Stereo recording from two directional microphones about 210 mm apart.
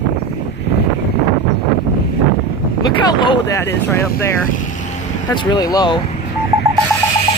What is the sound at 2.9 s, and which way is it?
Speech, 20° left (ahead or behind).